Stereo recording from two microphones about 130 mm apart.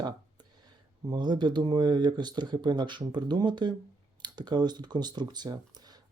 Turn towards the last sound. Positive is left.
turn(degrees=-30)  # may be behind; listen again after turning